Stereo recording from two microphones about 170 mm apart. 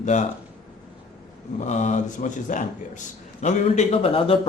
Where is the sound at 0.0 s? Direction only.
45° left (ahead or behind).